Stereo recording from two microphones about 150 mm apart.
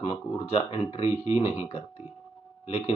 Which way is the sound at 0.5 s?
40° left (ahead or behind).